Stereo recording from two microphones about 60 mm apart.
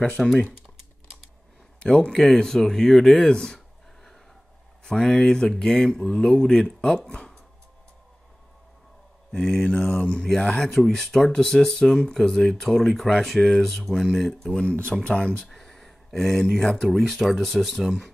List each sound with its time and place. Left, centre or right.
0.0 s speech: centre
1.8 s a man's voice: centre
9.3 s speech: centre
15.4 s speech: centre